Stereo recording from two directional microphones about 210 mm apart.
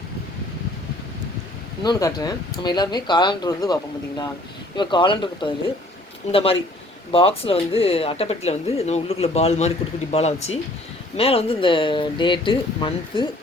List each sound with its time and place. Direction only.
1.8 s speech: 20° left (ahead or behind)
4.8 s speech: 20° left (ahead or behind)